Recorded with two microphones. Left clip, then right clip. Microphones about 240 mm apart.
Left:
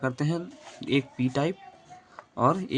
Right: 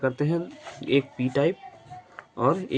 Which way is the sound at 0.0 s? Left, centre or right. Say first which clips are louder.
Right 4 dB; left.